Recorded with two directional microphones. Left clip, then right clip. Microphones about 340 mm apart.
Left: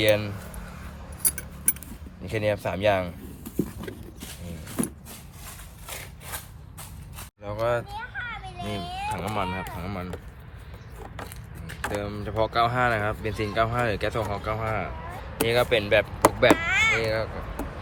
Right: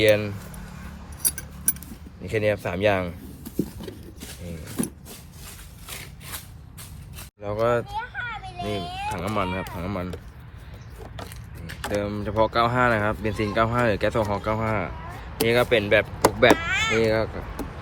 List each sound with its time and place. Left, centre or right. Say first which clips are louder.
0.0 s speech: right 3 dB; centre
2.2 s speech: right 2 dB; centre
3.8 s horse: even; centre
7.4 s speech: right 3 dB; centre
7.9 s children playing: right 3 dB; centre
8.8 s speech: right 1 dB; centre
9.0 s speech: right 2 dB; centre
11.8 s speech: right 3 dB; centre
16.6 s a sound: left 2 dB; centre
17.1 s speech: right 4 dB; centre